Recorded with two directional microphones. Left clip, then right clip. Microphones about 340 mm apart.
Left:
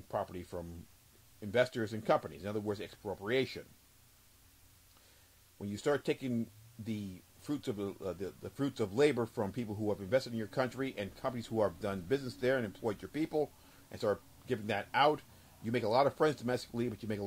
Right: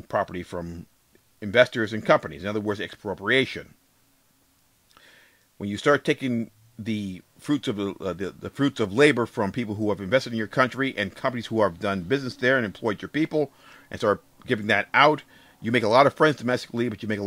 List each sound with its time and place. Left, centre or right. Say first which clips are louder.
0.1 s speech: right 12 dB; right
5.6 s speech: right 12 dB; right